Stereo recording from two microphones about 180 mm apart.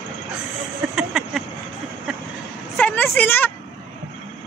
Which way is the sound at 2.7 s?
10° left (ahead or behind).